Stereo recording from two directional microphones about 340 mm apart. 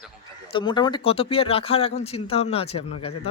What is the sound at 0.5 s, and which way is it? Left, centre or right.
Speech, centre.